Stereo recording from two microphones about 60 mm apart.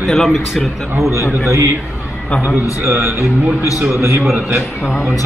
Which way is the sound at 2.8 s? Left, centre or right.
Right.